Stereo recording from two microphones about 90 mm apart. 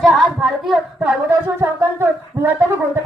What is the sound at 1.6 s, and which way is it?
Speech, 25° right (ahead or behind).